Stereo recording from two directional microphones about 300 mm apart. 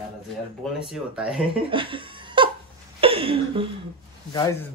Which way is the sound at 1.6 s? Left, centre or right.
Centre.